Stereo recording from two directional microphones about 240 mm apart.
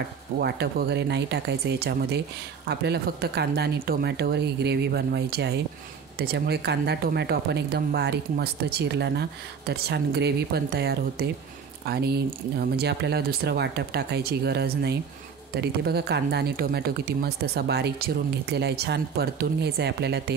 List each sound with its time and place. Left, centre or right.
0.4 s speech: right